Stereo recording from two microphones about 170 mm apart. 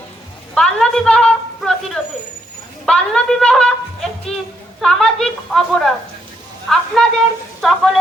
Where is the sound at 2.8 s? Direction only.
5° left (ahead or behind).